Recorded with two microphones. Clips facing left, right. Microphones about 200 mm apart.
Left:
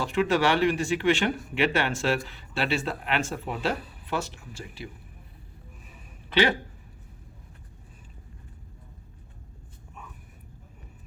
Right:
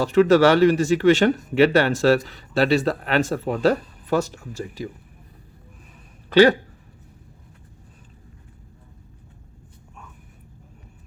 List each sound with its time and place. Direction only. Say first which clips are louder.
0.0 s speech: right 9 dB; 40° right (ahead or behind)